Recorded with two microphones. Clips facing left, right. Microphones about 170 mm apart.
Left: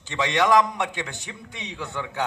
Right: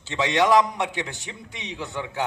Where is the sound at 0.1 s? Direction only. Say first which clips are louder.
Right 1 dB; 15° right (ahead or behind).